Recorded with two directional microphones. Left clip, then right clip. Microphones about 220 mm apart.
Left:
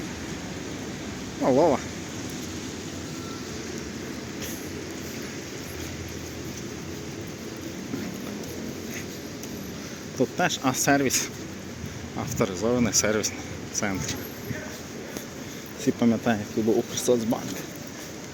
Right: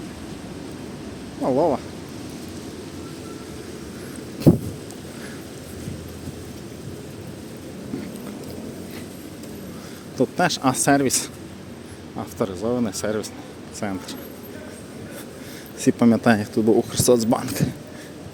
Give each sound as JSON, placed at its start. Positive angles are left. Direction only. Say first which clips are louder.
{"t": 1.4, "sound": "speech", "louder": "right 1 dB", "side_deg": -5}
{"t": 10.2, "sound": "speech", "louder": "right 4 dB", "side_deg": -25}
{"t": 12.1, "sound": "speech", "louder": "right 1 dB", "side_deg": -15}
{"t": 15.8, "sound": "speech", "louder": "right 6 dB", "side_deg": -30}